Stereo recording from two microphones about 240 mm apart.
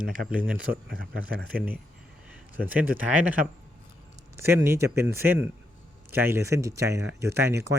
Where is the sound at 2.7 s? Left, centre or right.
Right.